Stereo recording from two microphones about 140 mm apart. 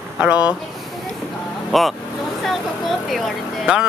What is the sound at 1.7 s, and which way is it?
Speech, centre (ahead or behind).